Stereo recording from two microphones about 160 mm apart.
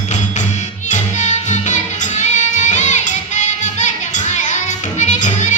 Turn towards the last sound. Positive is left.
turn(degrees=50)  # may be behind; listen again after turning